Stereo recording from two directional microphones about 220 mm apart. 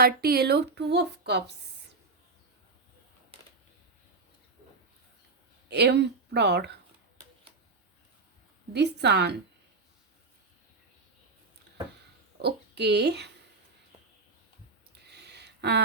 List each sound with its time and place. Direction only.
0.0 s a woman's voice: 45° right (ahead or behind)
3.3 s a sound: 25° right (ahead or behind)
5.6 s speech: 50° right (ahead or behind)
8.7 s a woman's voice: 50° right (ahead or behind)
12.4 s a woman's voice: 50° right (ahead or behind)
15.0 s a sound: 50° right (ahead or behind)